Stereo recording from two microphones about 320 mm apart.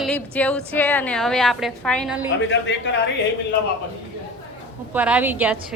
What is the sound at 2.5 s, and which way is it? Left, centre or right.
Speech, left.